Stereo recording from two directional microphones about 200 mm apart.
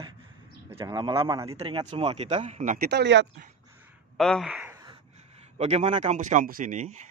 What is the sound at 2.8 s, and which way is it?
Speech, 60° right (ahead or behind).